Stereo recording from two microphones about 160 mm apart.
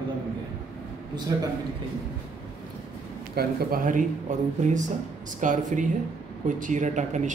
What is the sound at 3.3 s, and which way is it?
Speech, 60° right (ahead or behind).